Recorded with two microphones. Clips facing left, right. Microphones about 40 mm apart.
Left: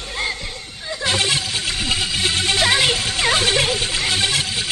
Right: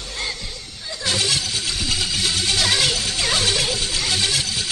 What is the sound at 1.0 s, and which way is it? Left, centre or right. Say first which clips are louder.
Music: left 2 dB; left.